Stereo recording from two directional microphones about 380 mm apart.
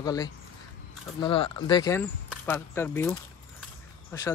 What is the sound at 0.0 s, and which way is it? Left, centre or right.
Speech, centre.